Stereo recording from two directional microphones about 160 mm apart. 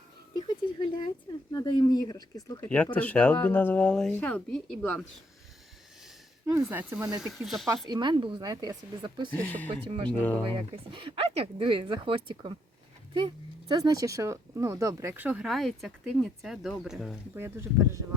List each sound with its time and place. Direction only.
0.3 s a sound: 25° left (ahead or behind)
1.5 s speech: 25° left (ahead or behind)
2.6 s a woman's voice: 10° left (ahead or behind)
6.4 s speech: 15° right (ahead or behind); by 7.7 s centre (ahead or behind)
7.9 s speech: 25° right (ahead or behind)
9.3 s a woman's voice: 10° left (ahead or behind)
10.5 s speech: 30° right (ahead or behind); by 15.4 s 10° right (ahead or behind)
15.4 s speech: centre (ahead or behind)
17.3 s speech: 15° right (ahead or behind)